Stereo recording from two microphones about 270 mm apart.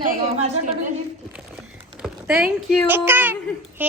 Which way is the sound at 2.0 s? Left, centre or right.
Centre.